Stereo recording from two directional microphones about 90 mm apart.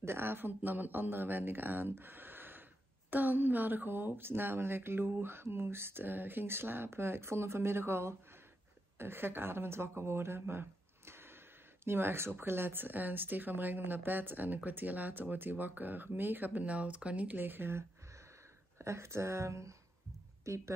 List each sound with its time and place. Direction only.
0.0 s a woman's voice: 25° right (ahead or behind)